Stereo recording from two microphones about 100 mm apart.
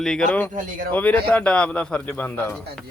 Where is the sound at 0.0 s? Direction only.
5° left (ahead or behind).